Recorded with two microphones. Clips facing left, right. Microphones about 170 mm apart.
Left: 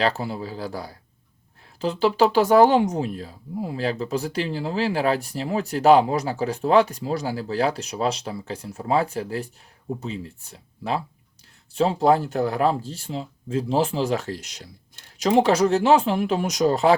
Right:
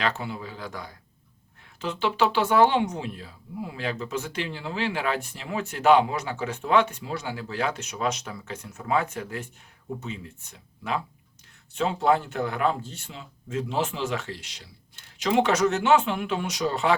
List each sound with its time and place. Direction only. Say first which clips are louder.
0.0 s speech: left 5 dB; 35° left (ahead or behind)